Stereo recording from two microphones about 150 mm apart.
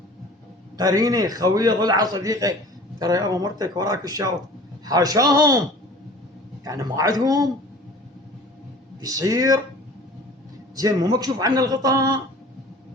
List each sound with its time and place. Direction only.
0.8 s a man's voice: 25° right (ahead or behind)
6.7 s a man's voice: 25° right (ahead or behind)
9.0 s a man's voice: 25° right (ahead or behind)
10.8 s a man's voice: 25° right (ahead or behind)